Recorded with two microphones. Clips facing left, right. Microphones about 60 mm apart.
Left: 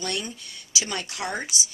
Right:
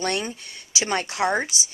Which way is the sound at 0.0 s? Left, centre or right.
Right.